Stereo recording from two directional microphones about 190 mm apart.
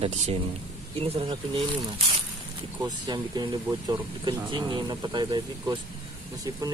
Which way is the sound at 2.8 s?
20° right (ahead or behind).